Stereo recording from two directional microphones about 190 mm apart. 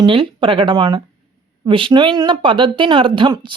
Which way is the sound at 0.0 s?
25° right (ahead or behind).